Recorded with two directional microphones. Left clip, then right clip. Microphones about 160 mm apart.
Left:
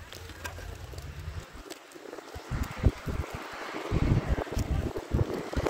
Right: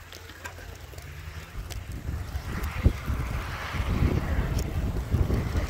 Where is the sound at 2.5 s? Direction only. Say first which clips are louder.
Right 3 dB; 25° left (ahead or behind).